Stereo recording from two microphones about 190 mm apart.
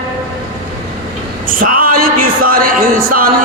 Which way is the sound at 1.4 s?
45° right (ahead or behind).